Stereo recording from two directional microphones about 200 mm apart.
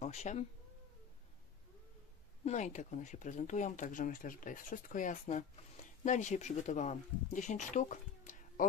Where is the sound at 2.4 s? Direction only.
35° left (ahead or behind).